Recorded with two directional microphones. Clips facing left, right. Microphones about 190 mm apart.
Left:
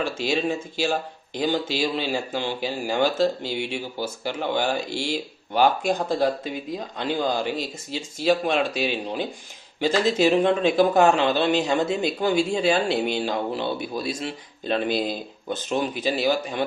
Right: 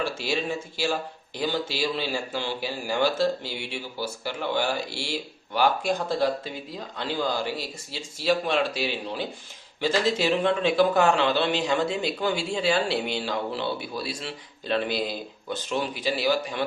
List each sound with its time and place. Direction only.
0.0 s speech: 20° left (ahead or behind)